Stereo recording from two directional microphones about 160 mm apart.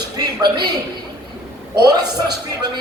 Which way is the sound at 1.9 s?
25° right (ahead or behind).